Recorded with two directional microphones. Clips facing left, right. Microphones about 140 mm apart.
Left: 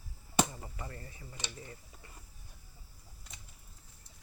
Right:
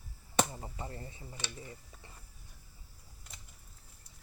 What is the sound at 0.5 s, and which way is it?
Speech, 25° right (ahead or behind).